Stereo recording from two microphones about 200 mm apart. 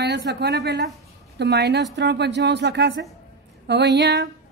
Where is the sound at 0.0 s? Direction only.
60° right (ahead or behind).